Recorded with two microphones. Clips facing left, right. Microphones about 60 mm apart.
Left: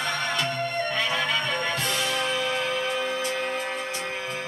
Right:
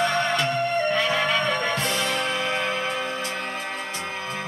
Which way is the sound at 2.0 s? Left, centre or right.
Right.